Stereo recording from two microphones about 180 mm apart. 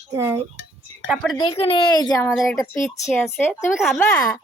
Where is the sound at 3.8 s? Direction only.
5° left (ahead or behind).